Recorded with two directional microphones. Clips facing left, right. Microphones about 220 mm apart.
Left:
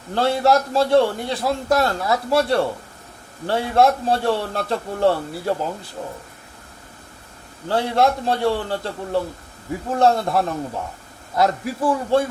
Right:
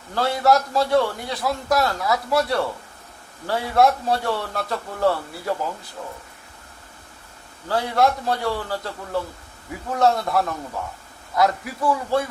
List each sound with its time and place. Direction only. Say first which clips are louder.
0.1 s a man's voice: left 2 dB; 25° left (ahead or behind)
7.7 s a man's voice: left 2 dB; 25° left (ahead or behind)